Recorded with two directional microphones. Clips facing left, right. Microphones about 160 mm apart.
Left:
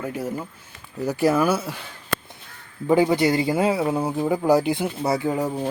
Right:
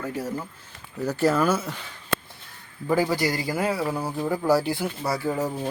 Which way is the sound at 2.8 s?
20° left (ahead or behind).